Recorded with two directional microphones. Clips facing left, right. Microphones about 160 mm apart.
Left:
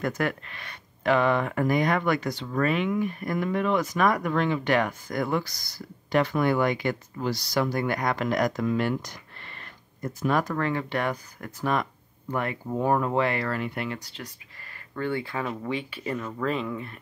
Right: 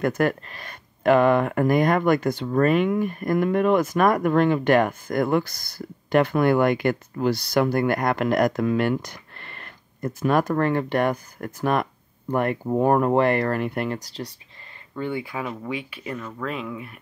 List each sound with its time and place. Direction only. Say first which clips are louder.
0.0 s speech: right 6 dB; 50° right (ahead or behind)
15.0 s speech: right 1 dB; 15° right (ahead or behind)